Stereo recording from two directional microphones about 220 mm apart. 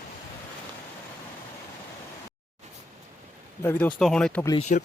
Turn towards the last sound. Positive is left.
turn(degrees=35)  # may be behind; listen again after turning